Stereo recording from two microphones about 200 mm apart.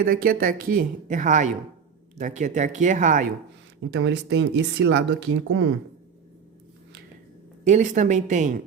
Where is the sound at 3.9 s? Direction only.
60° right (ahead or behind); by 5.7 s 80° right.